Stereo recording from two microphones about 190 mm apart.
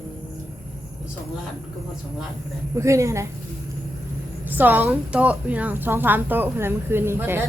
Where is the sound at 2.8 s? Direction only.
15° right (ahead or behind).